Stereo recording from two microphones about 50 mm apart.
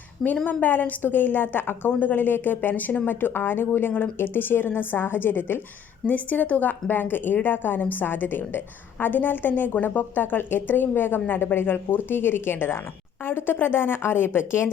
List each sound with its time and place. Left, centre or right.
0.4 s a woman's voice: left